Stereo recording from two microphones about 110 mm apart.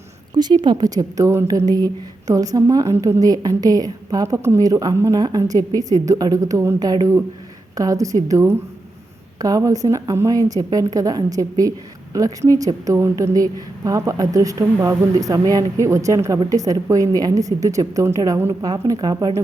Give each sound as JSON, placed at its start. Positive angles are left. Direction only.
{"t": 0.3, "sound": "a woman's voice", "side_deg": -40}